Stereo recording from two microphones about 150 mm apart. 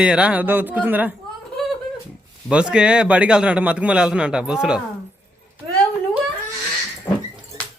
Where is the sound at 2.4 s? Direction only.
5° right (ahead or behind).